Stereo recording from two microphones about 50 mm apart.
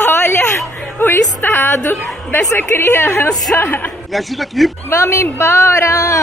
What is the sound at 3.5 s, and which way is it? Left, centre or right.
Speech, left.